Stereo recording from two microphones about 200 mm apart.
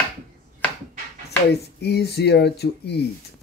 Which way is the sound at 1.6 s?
55° left (ahead or behind).